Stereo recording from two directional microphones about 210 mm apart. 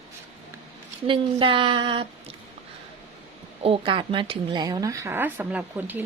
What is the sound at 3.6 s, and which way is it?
A woman's voice, 25° right (ahead or behind).